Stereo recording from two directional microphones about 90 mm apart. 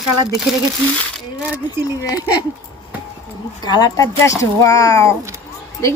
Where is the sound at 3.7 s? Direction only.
50° left (ahead or behind).